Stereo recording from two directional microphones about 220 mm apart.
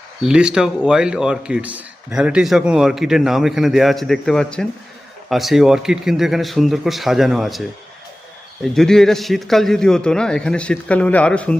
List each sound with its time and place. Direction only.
0.2 s speech: 5° right (ahead or behind)
8.6 s speech: centre (ahead or behind)